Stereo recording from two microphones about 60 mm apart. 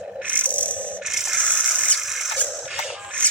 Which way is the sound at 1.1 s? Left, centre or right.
Centre.